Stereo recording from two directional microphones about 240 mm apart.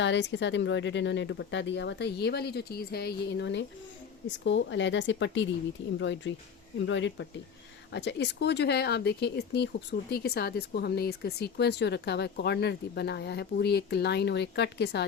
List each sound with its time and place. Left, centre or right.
0.0 s speech: left